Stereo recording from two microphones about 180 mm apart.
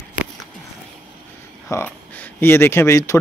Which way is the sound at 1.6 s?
10° left (ahead or behind).